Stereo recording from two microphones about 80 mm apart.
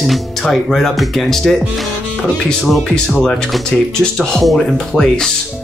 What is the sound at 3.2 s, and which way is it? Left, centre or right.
Speech, centre.